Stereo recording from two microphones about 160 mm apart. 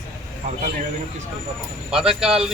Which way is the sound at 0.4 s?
50° right (ahead or behind).